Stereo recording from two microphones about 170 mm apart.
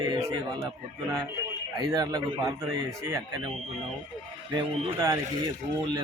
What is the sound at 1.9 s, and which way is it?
A man's voice, 25° right (ahead or behind).